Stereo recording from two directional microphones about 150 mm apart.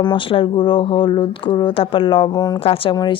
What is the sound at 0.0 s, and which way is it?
A woman's voice, 35° left (ahead or behind).